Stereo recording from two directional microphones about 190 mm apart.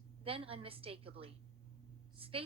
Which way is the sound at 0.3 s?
30° right (ahead or behind).